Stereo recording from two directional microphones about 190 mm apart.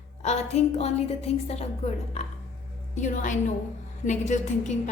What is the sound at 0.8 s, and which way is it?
A woman's voice, 35° left (ahead or behind).